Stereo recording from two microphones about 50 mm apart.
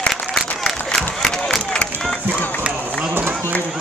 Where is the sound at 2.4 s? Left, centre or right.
Left.